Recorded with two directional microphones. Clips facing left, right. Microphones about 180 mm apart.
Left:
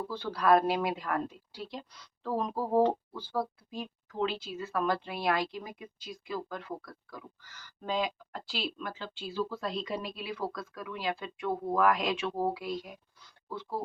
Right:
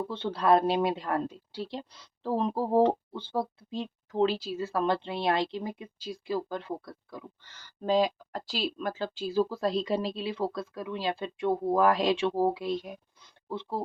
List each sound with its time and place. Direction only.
0.1 s speech: 25° right (ahead or behind)